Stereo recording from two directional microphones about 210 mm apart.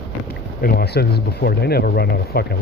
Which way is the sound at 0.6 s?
50° left (ahead or behind).